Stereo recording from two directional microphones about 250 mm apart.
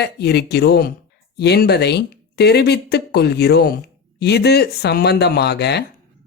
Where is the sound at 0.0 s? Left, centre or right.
Left.